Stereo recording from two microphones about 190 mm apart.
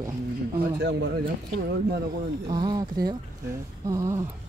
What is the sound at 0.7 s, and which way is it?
Speech, 65° right (ahead or behind).